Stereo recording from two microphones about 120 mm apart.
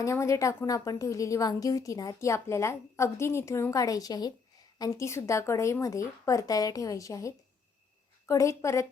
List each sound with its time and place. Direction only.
0.0 s a woman's voice: 25° left (ahead or behind)